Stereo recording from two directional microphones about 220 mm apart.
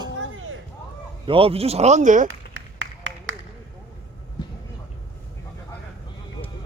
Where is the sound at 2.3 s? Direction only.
60° right (ahead or behind).